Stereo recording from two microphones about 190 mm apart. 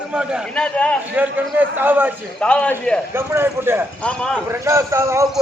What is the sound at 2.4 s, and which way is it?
Speech, 5° left (ahead or behind).